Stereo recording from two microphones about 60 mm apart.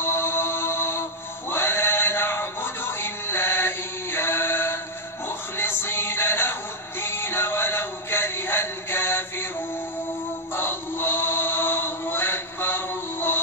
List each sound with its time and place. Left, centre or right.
0.0 s mantra: left
1.5 s music: left
10.5 s synthetic singing: left